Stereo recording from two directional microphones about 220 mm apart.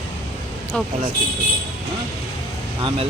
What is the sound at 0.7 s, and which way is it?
Speech, 5° left (ahead or behind).